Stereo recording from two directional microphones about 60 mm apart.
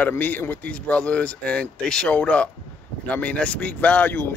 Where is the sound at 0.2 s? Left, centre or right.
Left.